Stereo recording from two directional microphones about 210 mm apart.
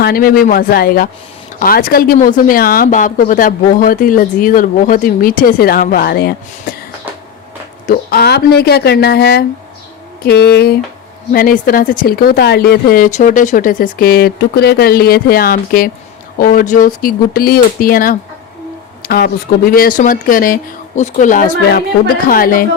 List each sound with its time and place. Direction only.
0.0 s speech: 45° left (ahead or behind)
7.9 s speech: 50° left (ahead or behind)